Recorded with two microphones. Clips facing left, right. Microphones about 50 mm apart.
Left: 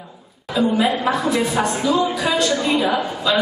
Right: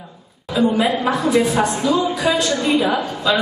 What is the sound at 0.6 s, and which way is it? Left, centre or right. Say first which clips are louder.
A woman's voice: right 1 dB; centre.